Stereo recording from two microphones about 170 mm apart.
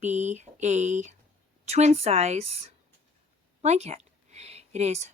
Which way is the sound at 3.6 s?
40° right (ahead or behind).